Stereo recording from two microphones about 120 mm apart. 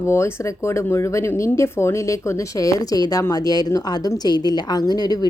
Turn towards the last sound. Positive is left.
turn(degrees=35)  # may be behind; listen again after turning